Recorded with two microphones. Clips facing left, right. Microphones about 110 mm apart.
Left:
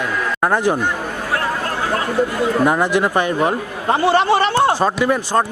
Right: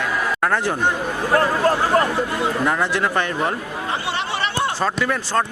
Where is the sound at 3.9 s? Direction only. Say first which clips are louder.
Left 12 dB; 50° left (ahead or behind).